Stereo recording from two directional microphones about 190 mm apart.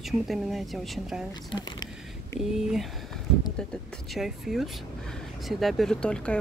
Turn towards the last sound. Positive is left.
turn(degrees=5)  # may be behind; listen again after turning